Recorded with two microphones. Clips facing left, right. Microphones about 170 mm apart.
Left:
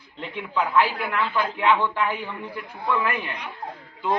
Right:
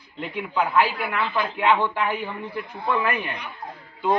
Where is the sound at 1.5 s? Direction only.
15° right (ahead or behind).